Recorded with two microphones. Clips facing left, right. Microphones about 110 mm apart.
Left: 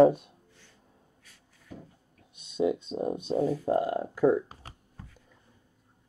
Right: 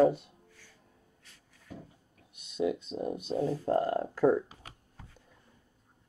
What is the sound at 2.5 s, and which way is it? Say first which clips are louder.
Speech: left 3 dB; 25° left (ahead or behind).